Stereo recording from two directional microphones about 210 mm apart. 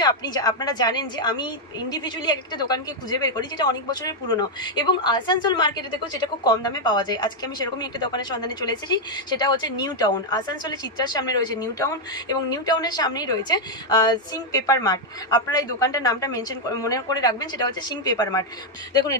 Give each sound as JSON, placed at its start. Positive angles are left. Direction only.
{"t": 0.0, "sound": "a woman's voice", "side_deg": 20}